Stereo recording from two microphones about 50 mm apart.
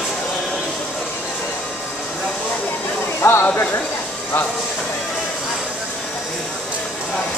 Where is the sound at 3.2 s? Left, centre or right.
Left.